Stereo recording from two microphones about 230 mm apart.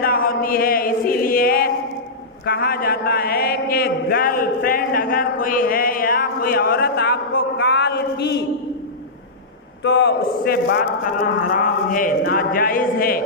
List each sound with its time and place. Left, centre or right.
0.0 s chant: left
9.8 s chant: left